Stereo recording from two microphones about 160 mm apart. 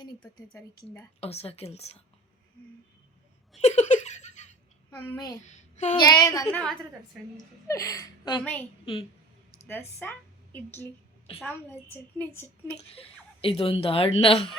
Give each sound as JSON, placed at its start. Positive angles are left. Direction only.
{"t": 1.2, "sound": "a woman's voice", "side_deg": 40}
{"t": 3.6, "sound": "giggle", "side_deg": 45}
{"t": 4.9, "sound": "speech", "side_deg": 20}
{"t": 5.5, "sound": "a sound", "side_deg": 45}
{"t": 6.0, "sound": "speech", "side_deg": 25}
{"t": 6.5, "sound": "a woman's voice", "side_deg": 5}
{"t": 7.7, "sound": "a woman's voice", "side_deg": 20}
{"t": 9.6, "sound": "a woman's voice", "side_deg": 15}
{"t": 12.9, "sound": "a woman's voice", "side_deg": 35}